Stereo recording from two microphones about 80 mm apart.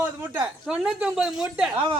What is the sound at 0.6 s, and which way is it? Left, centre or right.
Speech, centre.